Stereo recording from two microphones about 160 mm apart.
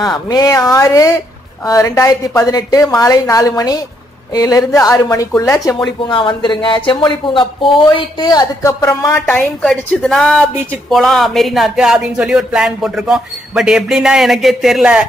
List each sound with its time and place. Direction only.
0.0 s speech: 25° left (ahead or behind)
6.0 s speech: 30° left (ahead or behind)
9.3 s speech: 5° left (ahead or behind)